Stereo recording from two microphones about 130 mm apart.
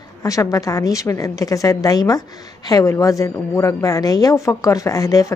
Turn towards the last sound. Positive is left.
turn(degrees=25)  # may be behind; listen again after turning